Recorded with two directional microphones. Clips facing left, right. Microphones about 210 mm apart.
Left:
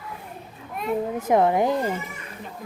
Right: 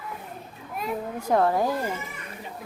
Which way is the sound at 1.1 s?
20° left (ahead or behind).